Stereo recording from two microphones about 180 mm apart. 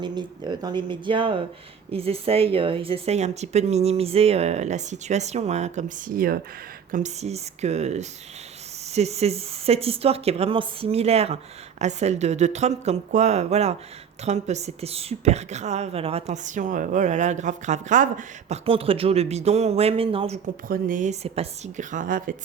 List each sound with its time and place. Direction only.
0.0 s speech: 25° right (ahead or behind); by 6.4 s 55° right (ahead or behind)
6.9 s speech: 40° right (ahead or behind)
20.7 s a woman's voice: 50° right (ahead or behind)